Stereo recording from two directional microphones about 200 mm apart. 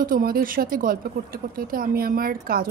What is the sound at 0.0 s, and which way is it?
Speech, 45° right (ahead or behind).